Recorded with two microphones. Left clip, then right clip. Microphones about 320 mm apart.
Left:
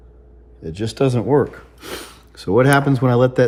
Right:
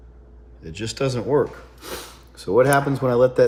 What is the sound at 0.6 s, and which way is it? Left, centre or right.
Speech, centre.